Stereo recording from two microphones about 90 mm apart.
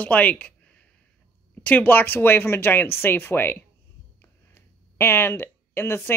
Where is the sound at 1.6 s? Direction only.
20° left (ahead or behind).